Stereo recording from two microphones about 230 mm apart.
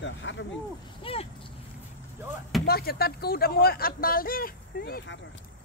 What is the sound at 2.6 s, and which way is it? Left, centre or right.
Speech, left.